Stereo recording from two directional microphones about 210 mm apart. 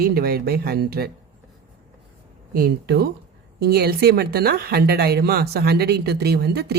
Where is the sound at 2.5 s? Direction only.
45° right (ahead or behind).